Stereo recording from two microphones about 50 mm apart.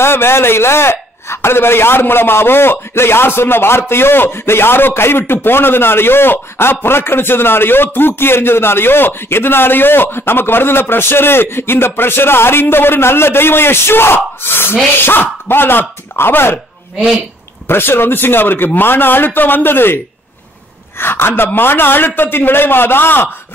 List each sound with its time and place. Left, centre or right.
0.0 s a man's voice: left
17.6 s a man's voice: left
21.0 s a man's voice: left